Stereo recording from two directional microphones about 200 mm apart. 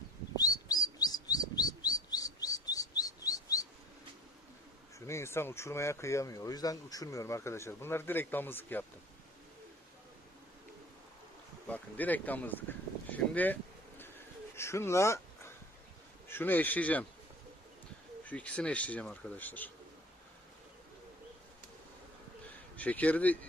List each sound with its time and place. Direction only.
0.3 s chirp: 20° left (ahead or behind)
4.9 s speech: 15° left (ahead or behind)
11.7 s speech: 10° left (ahead or behind)
13.1 s a sound: 10° left (ahead or behind)
16.3 s speech: 10° left (ahead or behind)
18.3 s speech: 5° left (ahead or behind)
22.8 s speech: 5° left (ahead or behind)